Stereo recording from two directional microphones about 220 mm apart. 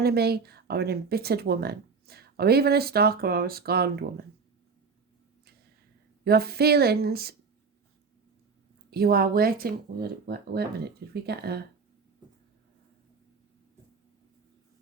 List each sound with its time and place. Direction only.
0.0 s speech: 45° right (ahead or behind)
6.2 s speech: 45° right (ahead or behind)
8.9 s speech: 45° right (ahead or behind)